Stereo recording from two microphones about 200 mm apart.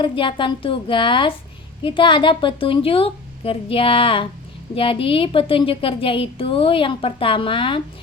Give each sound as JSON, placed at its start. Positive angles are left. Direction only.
{"t": 0.0, "sound": "a woman's voice", "side_deg": 25}